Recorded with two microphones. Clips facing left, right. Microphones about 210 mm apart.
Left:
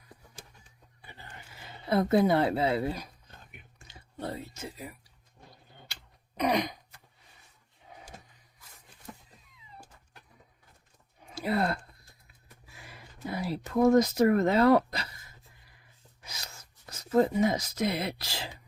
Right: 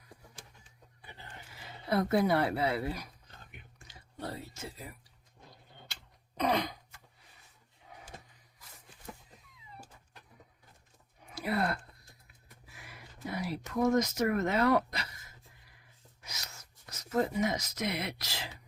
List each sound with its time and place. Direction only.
1.9 s a woman's voice: 25° left (ahead or behind)
5.9 s a sound: 15° left (ahead or behind)
11.3 s speech: 25° left (ahead or behind)
13.3 s speech: 30° left (ahead or behind)
16.2 s a sound: 30° left (ahead or behind)
16.9 s speech: 30° left (ahead or behind)